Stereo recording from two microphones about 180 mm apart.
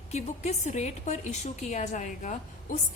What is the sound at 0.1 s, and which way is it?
A woman's voice, 40° left (ahead or behind).